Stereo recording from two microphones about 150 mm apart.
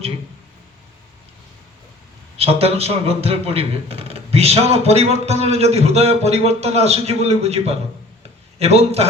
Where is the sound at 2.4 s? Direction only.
40° right (ahead or behind).